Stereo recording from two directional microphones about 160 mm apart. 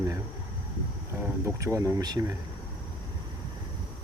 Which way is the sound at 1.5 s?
20° right (ahead or behind).